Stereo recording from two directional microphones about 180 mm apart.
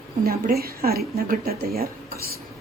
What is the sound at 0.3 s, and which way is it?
Speech, 55° right (ahead or behind).